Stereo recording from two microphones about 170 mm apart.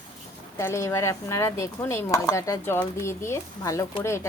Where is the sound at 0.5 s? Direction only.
15° left (ahead or behind).